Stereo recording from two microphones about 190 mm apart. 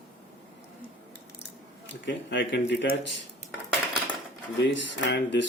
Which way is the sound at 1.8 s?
70° left (ahead or behind).